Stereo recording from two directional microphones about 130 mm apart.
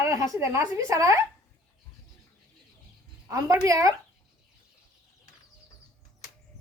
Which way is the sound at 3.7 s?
25° right (ahead or behind).